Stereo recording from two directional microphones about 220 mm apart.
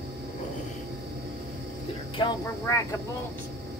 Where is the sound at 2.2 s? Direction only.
15° left (ahead or behind).